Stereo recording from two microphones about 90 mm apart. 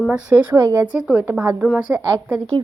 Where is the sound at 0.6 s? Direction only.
45° right (ahead or behind).